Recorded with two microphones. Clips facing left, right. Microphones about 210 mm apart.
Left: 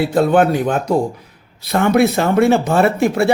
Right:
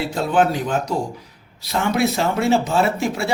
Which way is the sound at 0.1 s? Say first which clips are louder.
Left 3 dB; 60° left (ahead or behind).